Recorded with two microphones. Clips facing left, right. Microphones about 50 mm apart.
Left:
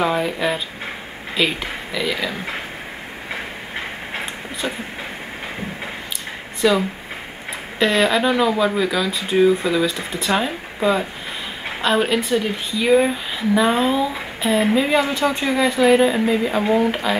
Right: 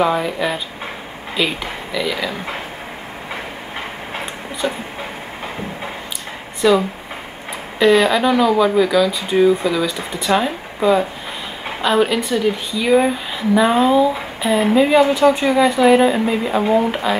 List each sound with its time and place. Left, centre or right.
0.0 s speech: centre
4.1 s a sound: centre
6.6 s speech: centre
7.8 s speech: centre